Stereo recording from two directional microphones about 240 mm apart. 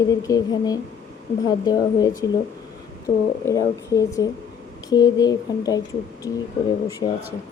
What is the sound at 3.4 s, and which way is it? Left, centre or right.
Speech, centre.